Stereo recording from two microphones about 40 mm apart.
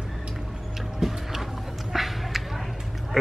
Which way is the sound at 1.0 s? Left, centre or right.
Centre.